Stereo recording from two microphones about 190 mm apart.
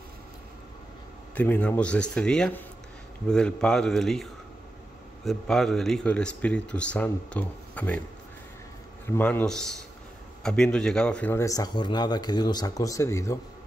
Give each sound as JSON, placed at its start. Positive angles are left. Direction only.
{"t": 1.3, "sound": "speech", "side_deg": 10}
{"t": 9.0, "sound": "speech", "side_deg": 10}